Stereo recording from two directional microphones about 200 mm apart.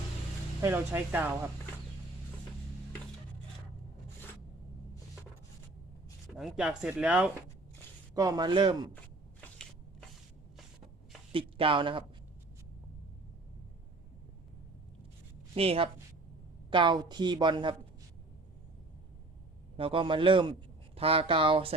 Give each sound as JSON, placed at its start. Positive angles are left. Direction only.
{"t": 0.6, "sound": "speech", "side_deg": -10}
{"t": 6.3, "sound": "speech", "side_deg": -5}
{"t": 8.1, "sound": "a woman's voice", "side_deg": -20}
{"t": 11.3, "sound": "speech", "side_deg": -25}
{"t": 15.5, "sound": "a woman's voice", "side_deg": -30}
{"t": 19.7, "sound": "a man's voice", "side_deg": -25}